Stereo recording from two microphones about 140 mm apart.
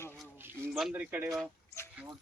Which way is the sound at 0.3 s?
15° right (ahead or behind).